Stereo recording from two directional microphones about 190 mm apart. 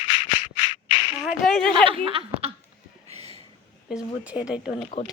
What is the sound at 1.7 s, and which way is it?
Speech, 30° right (ahead or behind).